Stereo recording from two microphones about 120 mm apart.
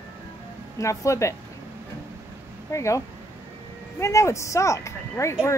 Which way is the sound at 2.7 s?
25° left (ahead or behind).